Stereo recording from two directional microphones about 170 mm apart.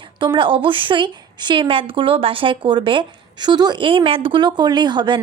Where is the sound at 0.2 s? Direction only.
30° right (ahead or behind).